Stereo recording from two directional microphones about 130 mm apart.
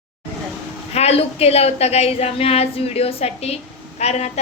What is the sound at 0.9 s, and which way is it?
A woman's voice, 55° left (ahead or behind).